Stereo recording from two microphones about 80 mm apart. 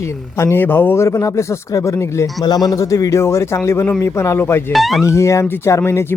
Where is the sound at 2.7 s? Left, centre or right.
Left.